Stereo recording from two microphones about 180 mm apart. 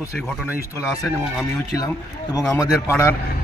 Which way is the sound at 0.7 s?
20° left (ahead or behind).